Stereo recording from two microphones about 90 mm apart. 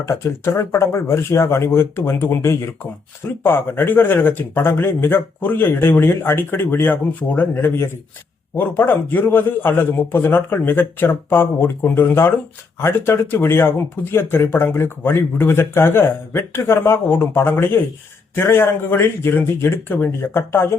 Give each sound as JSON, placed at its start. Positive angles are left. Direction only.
{"t": 0.0, "sound": "speech", "side_deg": 30}